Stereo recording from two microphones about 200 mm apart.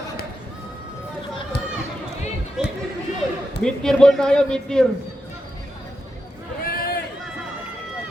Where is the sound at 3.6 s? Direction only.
5° left (ahead or behind).